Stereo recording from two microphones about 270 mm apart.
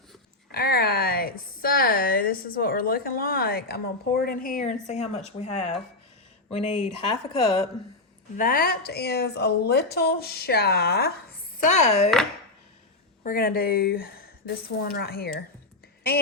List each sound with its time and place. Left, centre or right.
0.5 s a woman's voice: left
8.4 s a woman's voice: left
13.2 s a woman's voice: left